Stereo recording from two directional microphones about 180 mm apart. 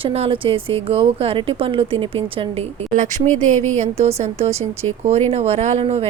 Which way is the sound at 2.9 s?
45° right (ahead or behind).